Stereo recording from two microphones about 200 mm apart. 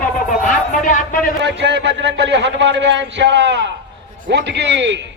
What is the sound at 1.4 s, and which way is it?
A man's voice, 60° right (ahead or behind).